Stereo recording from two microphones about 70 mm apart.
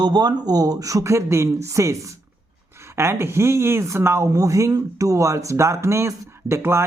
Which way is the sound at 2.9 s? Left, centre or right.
Right.